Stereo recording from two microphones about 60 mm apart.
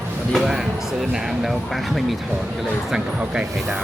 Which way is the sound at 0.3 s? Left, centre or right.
Centre.